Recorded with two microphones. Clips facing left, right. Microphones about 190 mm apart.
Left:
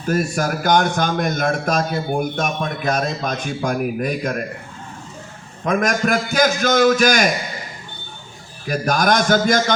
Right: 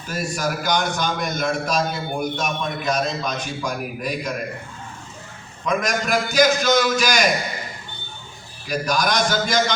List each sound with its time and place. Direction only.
0.0 s a man's voice: 55° left (ahead or behind)
5.6 s a man's voice: 50° left (ahead or behind)
8.6 s a man's voice: 50° left (ahead or behind)